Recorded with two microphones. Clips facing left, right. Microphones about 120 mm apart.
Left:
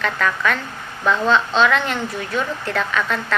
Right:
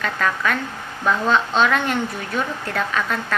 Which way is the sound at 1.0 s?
5° right (ahead or behind).